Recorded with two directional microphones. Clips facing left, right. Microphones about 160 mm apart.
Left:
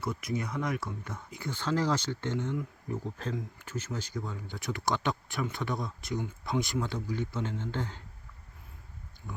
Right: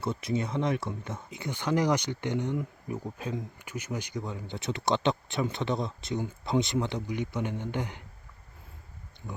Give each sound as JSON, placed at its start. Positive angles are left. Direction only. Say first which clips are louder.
{"t": 0.0, "sound": "speech", "louder": "right 3 dB", "side_deg": -25}